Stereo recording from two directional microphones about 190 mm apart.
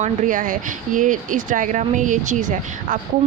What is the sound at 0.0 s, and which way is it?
A woman's voice, 40° right (ahead or behind).